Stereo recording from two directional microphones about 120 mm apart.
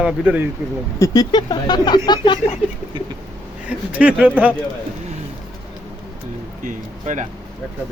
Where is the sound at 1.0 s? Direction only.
30° left (ahead or behind).